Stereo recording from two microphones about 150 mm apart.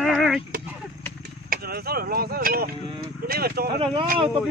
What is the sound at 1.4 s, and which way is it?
Speech, 85° right.